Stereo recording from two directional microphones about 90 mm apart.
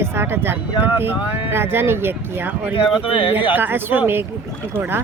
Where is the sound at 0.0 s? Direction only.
25° right (ahead or behind).